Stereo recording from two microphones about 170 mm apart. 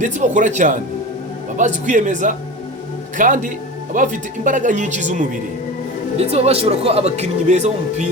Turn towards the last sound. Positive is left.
turn(degrees=-40)  # may be behind; listen again after turning